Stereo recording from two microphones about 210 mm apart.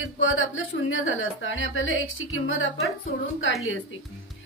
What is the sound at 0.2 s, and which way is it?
A woman's voice, 70° left (ahead or behind).